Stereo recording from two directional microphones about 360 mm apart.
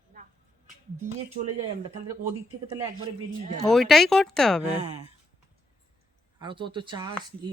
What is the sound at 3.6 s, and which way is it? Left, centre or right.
Speech, centre.